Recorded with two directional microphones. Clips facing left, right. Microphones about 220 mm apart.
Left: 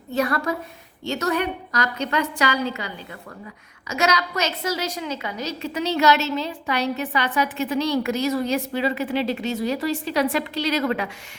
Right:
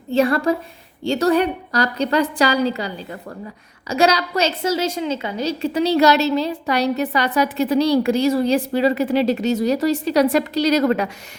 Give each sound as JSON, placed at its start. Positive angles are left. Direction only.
{"t": 0.1, "sound": "a woman's voice", "side_deg": -30}